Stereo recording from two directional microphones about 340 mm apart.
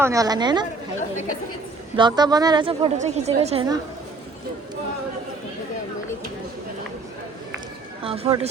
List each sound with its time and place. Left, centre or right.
0.0 s a woman's voice: centre
2.0 s a woman's voice: centre
8.0 s a woman's voice: centre